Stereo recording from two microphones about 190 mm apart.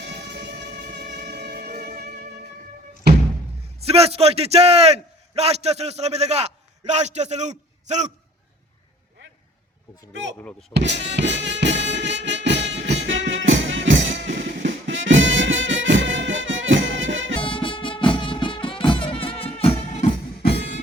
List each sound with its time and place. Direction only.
0.0 s music: 65° right (ahead or behind)
3.8 s a man's voice: 30° right (ahead or behind)
10.8 s music: 65° right (ahead or behind); by 17.3 s 85° right
17.4 s music: 25° left (ahead or behind)